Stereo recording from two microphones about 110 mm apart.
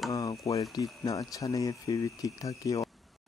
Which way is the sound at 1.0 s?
30° left (ahead or behind).